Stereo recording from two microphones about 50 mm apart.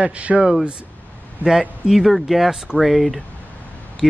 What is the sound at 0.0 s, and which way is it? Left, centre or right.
Speech, right.